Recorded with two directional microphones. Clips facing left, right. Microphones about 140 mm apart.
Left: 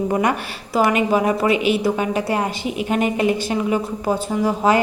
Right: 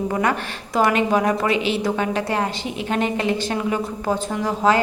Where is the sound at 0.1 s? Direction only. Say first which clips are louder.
Left 2 dB; 20° left (ahead or behind).